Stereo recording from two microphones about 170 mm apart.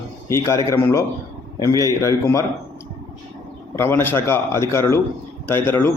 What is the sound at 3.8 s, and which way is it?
Speech, 15° left (ahead or behind).